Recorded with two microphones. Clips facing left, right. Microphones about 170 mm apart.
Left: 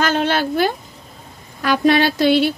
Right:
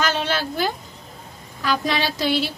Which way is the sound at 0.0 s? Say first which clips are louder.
Left 5 dB; 55° left (ahead or behind).